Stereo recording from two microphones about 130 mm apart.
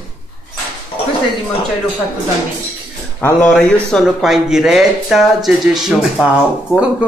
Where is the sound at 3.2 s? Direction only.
15° left (ahead or behind).